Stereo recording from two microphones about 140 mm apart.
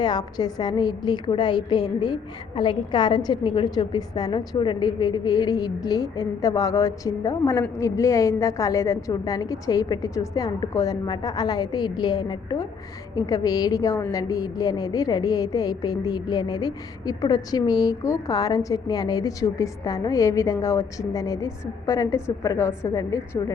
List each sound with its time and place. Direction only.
0.0 s a woman's voice: 30° left (ahead or behind)